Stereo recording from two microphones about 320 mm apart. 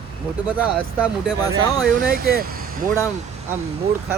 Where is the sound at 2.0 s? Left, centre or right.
Right.